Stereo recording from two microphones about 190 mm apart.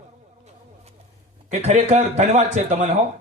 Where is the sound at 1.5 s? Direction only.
35° right (ahead or behind).